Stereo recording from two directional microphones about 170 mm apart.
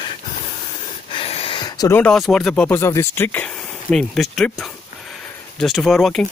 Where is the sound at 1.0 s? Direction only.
35° left (ahead or behind).